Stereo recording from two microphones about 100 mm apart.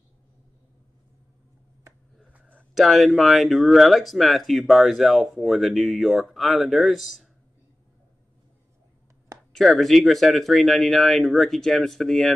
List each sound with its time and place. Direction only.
2.7 s speech: centre (ahead or behind)
9.5 s speech: centre (ahead or behind)